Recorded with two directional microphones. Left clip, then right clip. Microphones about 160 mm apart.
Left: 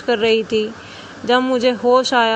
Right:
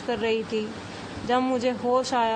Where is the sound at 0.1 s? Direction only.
30° left (ahead or behind).